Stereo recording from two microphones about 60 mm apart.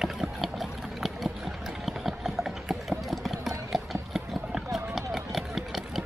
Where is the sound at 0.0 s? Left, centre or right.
Centre.